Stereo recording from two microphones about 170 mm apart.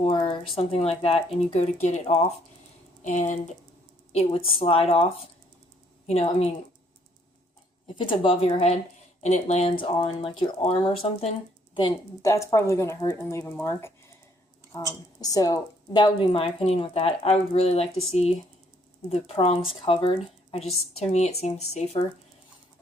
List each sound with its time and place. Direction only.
0.0 s speech: 30° left (ahead or behind)
4.1 s speech: 35° left (ahead or behind)
7.9 s speech: 30° left (ahead or behind)
12.3 s speech: 15° left (ahead or behind); by 21.8 s 40° left (ahead or behind)